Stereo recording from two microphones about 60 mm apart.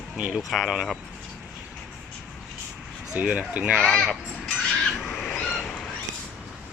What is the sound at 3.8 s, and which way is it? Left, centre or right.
Crow, centre.